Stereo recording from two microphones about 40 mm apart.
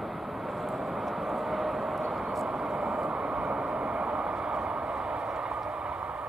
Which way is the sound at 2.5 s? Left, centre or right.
Centre.